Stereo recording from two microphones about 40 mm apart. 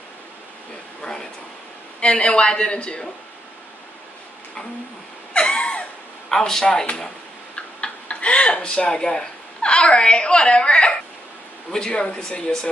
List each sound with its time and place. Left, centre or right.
2.0 s speech: left
5.3 s a sound: left
6.2 s speech: centre
7.5 s tick-tock: left
11.7 s speech: left